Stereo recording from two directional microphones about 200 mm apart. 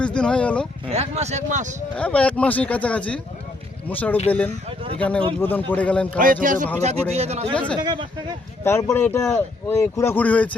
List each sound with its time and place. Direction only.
0.0 s speech: 5° left (ahead or behind)
0.9 s speech: 30° right (ahead or behind)
2.0 s speech: 5° left (ahead or behind)
6.1 s speech: 40° right (ahead or behind); by 8.4 s 20° right (ahead or behind)
8.6 s speech: 10° left (ahead or behind)